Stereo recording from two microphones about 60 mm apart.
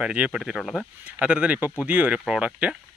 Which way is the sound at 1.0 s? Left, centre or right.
Right.